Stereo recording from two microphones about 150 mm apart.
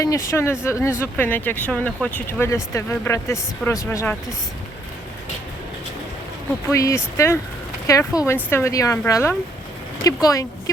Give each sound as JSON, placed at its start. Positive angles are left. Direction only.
{"t": 0.0, "sound": "speech", "side_deg": 20}
{"t": 6.7, "sound": "speech", "side_deg": 20}